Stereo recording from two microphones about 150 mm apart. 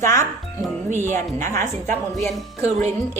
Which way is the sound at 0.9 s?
55° right (ahead or behind).